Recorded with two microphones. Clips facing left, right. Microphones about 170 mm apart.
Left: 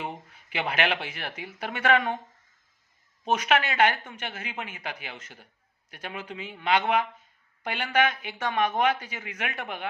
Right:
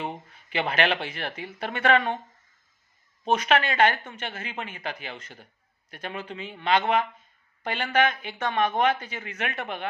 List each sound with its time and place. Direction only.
0.3 s speech: 10° left (ahead or behind)
3.2 s speech: 10° left (ahead or behind)